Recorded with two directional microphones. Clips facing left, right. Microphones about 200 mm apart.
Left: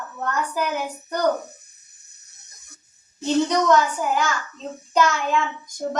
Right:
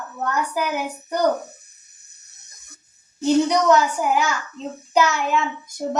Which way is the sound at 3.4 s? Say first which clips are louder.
Right 1 dB; 10° right (ahead or behind).